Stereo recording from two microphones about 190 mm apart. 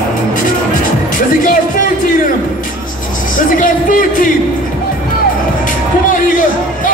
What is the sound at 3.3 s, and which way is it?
Music, 45° left (ahead or behind).